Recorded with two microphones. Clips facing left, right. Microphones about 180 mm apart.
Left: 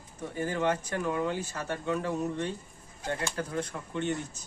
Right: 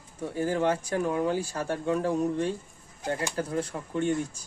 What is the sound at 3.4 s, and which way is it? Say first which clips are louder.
Speech: right 3 dB; 30° right (ahead or behind).